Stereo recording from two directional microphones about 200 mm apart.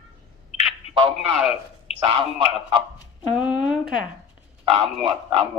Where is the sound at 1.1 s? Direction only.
Centre (ahead or behind).